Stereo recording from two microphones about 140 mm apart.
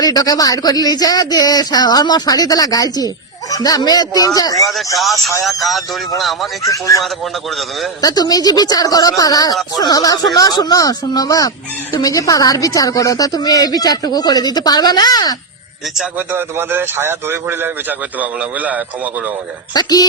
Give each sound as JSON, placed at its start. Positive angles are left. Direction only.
{"t": 0.0, "sound": "a woman's voice", "side_deg": 25}
{"t": 6.1, "sound": "a man's voice", "side_deg": 0}
{"t": 6.7, "sound": "a woman's voice", "side_deg": 25}
{"t": 8.0, "sound": "a woman's voice", "side_deg": 25}
{"t": 16.1, "sound": "a man's voice", "side_deg": -15}
{"t": 19.7, "sound": "a woman's voice", "side_deg": 30}